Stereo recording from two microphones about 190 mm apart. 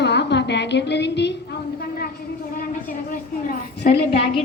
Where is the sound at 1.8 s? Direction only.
55° left (ahead or behind).